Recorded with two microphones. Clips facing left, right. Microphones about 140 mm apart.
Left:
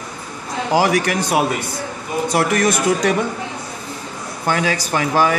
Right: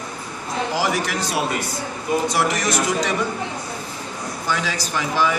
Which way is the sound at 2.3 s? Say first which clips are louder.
Left 4 dB; 55° left (ahead or behind).